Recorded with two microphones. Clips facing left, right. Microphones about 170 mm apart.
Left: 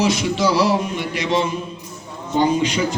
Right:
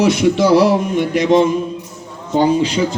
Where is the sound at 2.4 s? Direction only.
30° right (ahead or behind).